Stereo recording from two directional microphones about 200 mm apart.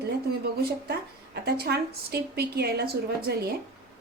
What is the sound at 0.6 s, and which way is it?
A woman's voice, 50° right (ahead or behind).